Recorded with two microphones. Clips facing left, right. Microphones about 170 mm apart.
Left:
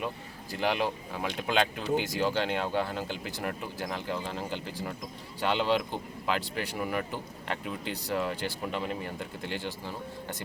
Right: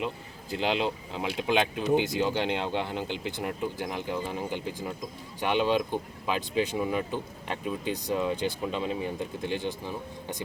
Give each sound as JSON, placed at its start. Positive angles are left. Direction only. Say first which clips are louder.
{"t": 0.5, "sound": "speech", "louder": "right 1 dB", "side_deg": -20}